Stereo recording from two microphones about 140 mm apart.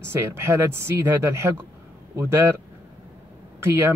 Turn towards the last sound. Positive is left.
turn(degrees=-15)  # may be behind; listen again after turning